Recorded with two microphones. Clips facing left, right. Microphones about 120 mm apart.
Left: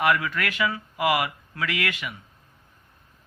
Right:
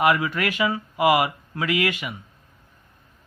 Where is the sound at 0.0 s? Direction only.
20° right (ahead or behind).